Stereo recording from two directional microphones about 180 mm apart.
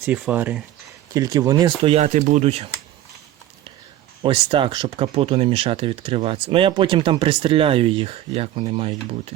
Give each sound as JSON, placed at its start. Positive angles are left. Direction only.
{"t": 0.0, "sound": "speech", "side_deg": -10}
{"t": 1.1, "sound": "speech", "side_deg": -20}
{"t": 1.8, "sound": "speech", "side_deg": -35}
{"t": 4.2, "sound": "speech", "side_deg": -30}